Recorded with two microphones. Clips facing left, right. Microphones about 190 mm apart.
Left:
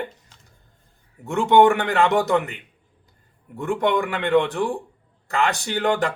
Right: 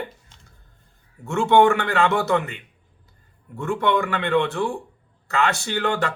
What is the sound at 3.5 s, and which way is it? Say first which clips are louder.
Speech: left 1 dB; 15° left (ahead or behind).